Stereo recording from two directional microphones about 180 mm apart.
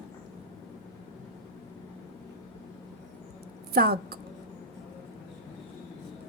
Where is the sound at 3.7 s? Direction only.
60° right (ahead or behind).